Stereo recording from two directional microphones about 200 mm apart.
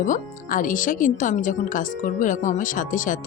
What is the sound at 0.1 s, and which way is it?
Speech, 40° left (ahead or behind).